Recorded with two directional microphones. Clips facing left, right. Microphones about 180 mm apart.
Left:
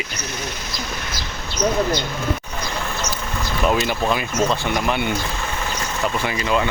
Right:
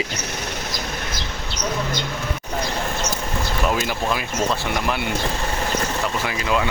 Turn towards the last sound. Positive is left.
turn(degrees=0)  # may be behind; listen again after turning